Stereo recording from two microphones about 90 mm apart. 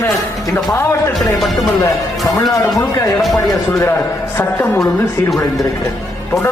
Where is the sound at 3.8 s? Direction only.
30° left (ahead or behind).